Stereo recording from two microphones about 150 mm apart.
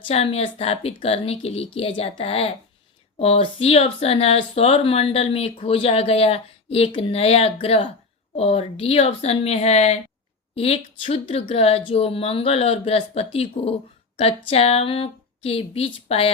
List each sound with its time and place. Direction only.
0.1 s a woman's voice: 40° left (ahead or behind)